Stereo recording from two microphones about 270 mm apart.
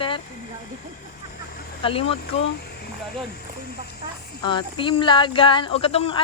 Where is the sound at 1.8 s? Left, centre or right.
Left.